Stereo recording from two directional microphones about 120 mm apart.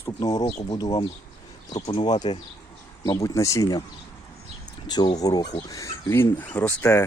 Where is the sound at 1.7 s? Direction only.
35° left (ahead or behind).